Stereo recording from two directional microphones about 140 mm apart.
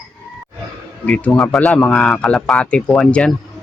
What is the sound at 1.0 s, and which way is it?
Speech, 10° left (ahead or behind).